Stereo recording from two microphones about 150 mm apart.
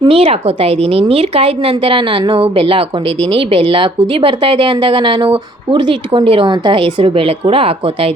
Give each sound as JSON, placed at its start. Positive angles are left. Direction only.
{"t": 0.0, "sound": "a woman's voice", "side_deg": -40}